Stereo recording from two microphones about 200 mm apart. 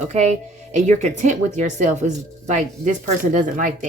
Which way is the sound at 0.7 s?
35° right (ahead or behind).